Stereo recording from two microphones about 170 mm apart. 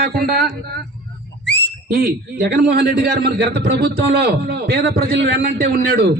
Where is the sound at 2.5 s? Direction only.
75° right (ahead or behind).